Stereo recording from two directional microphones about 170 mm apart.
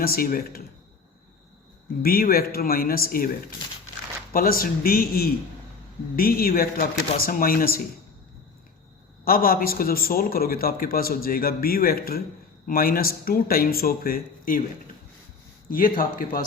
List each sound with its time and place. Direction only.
0.0 s a man's voice: 60° left (ahead or behind)
2.0 s a man's voice: 60° left (ahead or behind)
4.3 s a man's voice: 60° left (ahead or behind)
9.2 s a man's voice: 60° left (ahead or behind)
15.7 s a man's voice: 55° left (ahead or behind)